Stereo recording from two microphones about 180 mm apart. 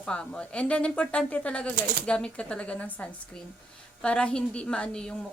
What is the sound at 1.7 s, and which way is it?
Speech, 50° right (ahead or behind).